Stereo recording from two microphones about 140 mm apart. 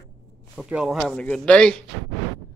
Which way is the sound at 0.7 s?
5° right (ahead or behind).